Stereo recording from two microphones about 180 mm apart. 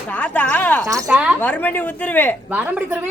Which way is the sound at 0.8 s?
20° right (ahead or behind).